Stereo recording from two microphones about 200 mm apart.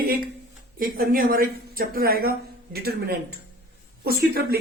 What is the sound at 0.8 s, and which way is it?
A woman's voice, 45° right (ahead or behind).